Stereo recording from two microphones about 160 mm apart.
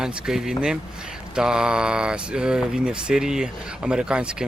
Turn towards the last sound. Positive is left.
turn(degrees=-5)  # may be behind; listen again after turning